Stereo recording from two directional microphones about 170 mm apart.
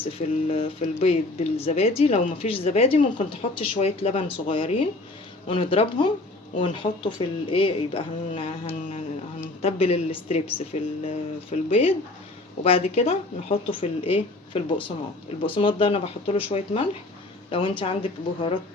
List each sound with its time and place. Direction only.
0.1 s speech: 35° left (ahead or behind)